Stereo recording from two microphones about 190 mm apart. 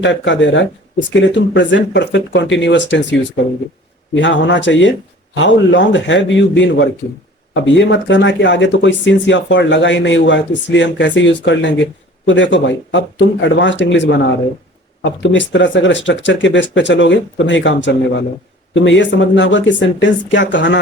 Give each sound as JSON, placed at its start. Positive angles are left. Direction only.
{"t": 0.0, "sound": "speech", "side_deg": 75}